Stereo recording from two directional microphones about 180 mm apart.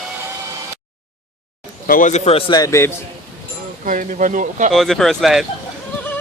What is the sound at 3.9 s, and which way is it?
Speech, 45° right (ahead or behind).